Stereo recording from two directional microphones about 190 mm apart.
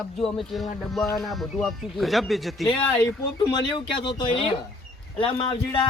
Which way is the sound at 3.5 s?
25° left (ahead or behind).